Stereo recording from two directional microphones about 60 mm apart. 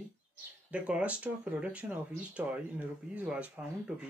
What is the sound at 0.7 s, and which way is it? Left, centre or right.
Speech, centre.